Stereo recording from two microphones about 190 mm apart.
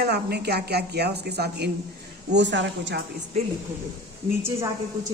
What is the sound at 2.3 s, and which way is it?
Speech, 70° right (ahead or behind).